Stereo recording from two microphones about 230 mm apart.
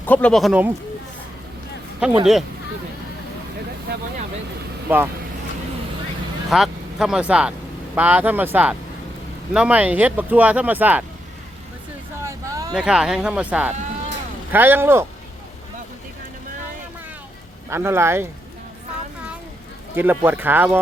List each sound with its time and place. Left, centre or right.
0.0 s speech: centre
2.0 s speech: centre
3.9 s speech: right
4.9 s speech: centre
6.5 s speech: centre
12.2 s vehicle: centre
12.7 s speech: centre
17.7 s speech: centre
20.0 s speech: centre